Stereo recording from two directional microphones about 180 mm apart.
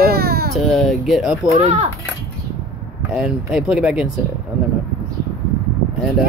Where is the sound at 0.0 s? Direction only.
60° right (ahead or behind).